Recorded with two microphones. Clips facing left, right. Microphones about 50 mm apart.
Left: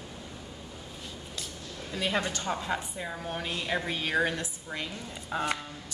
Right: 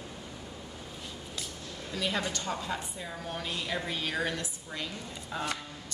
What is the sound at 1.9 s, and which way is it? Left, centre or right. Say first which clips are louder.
A woman's voice: left 2 dB; left.